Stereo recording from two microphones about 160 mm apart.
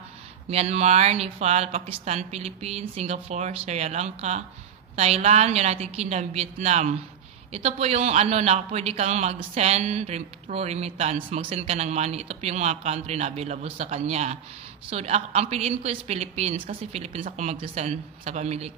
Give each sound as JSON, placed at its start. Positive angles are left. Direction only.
{"t": 0.5, "sound": "a man's voice", "side_deg": -40}